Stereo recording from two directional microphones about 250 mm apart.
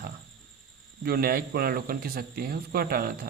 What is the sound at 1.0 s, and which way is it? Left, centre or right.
Speech, right.